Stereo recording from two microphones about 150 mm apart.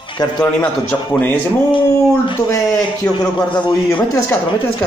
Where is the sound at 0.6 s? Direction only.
10° left (ahead or behind).